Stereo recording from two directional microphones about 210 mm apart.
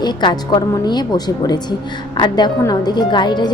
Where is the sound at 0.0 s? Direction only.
20° left (ahead or behind).